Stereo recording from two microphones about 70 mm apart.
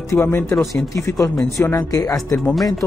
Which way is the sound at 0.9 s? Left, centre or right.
Left.